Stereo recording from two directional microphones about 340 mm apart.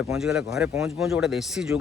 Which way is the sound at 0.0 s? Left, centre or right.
Centre.